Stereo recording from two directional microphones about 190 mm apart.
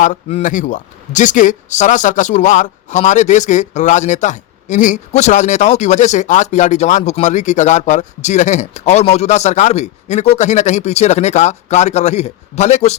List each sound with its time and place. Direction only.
0.0 s speech: 40° left (ahead or behind)